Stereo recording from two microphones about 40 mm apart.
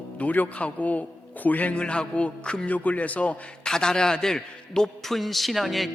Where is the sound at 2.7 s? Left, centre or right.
Left.